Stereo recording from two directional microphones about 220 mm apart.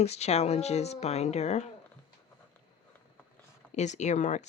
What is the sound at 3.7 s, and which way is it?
Speech, 30° left (ahead or behind).